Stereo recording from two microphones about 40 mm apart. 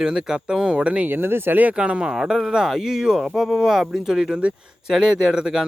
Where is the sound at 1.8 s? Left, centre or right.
Right.